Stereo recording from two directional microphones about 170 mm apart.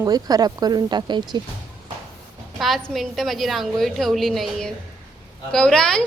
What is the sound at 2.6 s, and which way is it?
A woman's voice, centre (ahead or behind).